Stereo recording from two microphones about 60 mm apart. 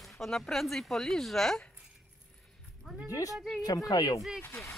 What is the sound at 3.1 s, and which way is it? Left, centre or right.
Speech, left.